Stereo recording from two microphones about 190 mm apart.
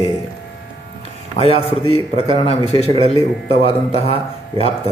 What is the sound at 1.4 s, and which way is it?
Speech, 30° left (ahead or behind).